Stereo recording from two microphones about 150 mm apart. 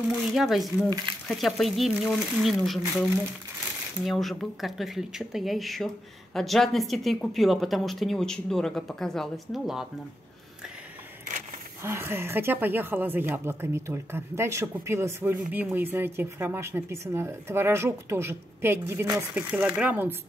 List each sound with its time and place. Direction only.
0.3 s a woman's voice: centre (ahead or behind)
0.8 s speech: 25° right (ahead or behind)
1.2 s a woman's voice: 5° left (ahead or behind)
11.8 s speech: 15° right (ahead or behind)
19.3 s speech: 5° right (ahead or behind)